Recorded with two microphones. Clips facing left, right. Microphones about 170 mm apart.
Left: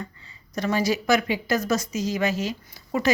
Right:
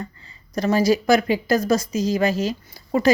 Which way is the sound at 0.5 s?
35° right (ahead or behind).